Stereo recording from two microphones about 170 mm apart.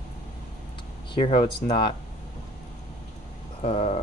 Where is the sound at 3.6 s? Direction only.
35° left (ahead or behind).